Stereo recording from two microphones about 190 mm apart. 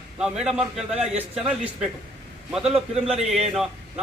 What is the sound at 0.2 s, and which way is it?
Speech, 5° right (ahead or behind).